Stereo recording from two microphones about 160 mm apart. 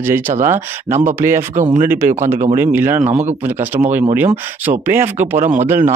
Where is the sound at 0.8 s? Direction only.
45° right (ahead or behind).